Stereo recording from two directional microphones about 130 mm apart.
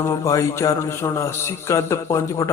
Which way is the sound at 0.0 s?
25° left (ahead or behind).